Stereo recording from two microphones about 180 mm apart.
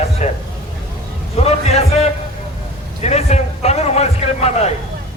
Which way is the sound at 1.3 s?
35° left (ahead or behind).